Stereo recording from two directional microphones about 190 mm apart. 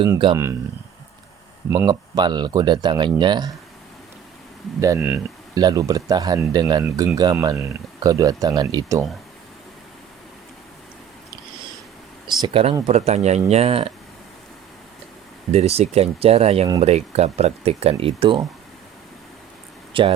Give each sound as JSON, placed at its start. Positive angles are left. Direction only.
{"t": 0.0, "sound": "speech", "side_deg": -25}
{"t": 1.7, "sound": "speech", "side_deg": -20}
{"t": 4.9, "sound": "speech", "side_deg": -5}
{"t": 5.5, "sound": "speech", "side_deg": -20}
{"t": 12.4, "sound": "speech", "side_deg": -25}
{"t": 15.5, "sound": "speech", "side_deg": -35}
{"t": 19.9, "sound": "speech", "side_deg": -25}